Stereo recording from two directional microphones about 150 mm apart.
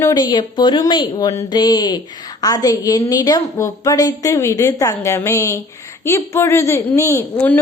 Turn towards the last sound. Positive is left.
turn(degrees=10)  # may be behind; listen again after turning